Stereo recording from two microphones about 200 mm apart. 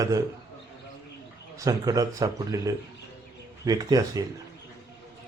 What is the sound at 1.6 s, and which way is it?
A man's voice, 15° right (ahead or behind).